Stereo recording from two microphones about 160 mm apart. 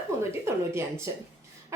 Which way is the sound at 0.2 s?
15° right (ahead or behind).